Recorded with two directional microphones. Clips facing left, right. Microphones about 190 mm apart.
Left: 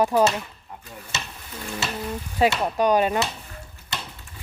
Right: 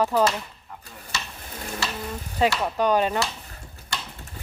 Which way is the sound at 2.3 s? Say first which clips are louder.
Left 2 dB; 15° left (ahead or behind).